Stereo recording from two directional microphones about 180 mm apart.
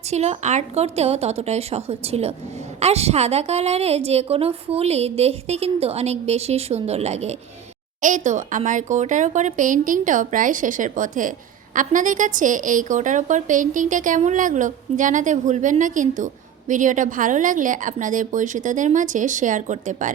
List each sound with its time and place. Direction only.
0.1 s a woman's voice: 40° right (ahead or behind)